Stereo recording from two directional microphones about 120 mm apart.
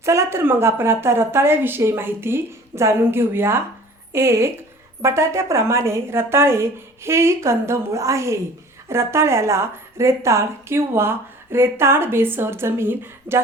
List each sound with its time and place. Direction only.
0.0 s a woman's voice: 25° right (ahead or behind)